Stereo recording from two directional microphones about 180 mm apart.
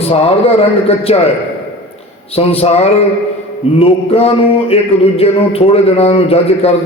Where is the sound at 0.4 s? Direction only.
35° left (ahead or behind).